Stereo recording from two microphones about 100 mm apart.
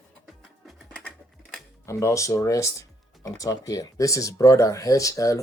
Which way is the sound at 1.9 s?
30° left (ahead or behind).